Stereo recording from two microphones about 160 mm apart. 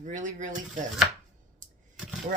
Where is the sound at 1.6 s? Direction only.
55° right (ahead or behind).